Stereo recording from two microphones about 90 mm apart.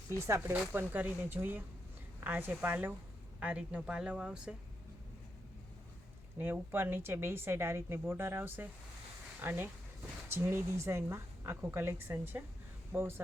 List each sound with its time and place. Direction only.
0.3 s a woman's voice: 25° right (ahead or behind); by 4.5 s 10° right (ahead or behind)
6.4 s a woman's voice: 25° right (ahead or behind)